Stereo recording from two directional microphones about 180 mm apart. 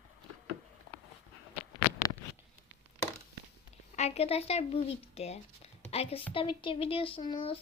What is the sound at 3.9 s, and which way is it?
Speech, 35° left (ahead or behind).